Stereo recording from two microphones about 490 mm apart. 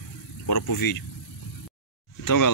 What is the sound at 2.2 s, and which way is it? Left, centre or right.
Speech, left.